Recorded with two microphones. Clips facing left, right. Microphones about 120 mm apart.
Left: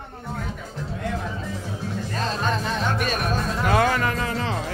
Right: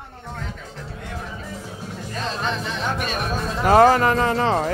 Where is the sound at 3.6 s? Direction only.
40° right (ahead or behind).